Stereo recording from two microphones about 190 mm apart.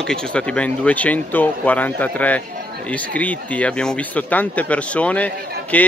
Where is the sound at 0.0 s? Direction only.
5° left (ahead or behind).